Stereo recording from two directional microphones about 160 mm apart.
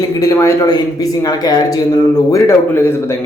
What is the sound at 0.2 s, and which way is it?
Speech, 20° left (ahead or behind).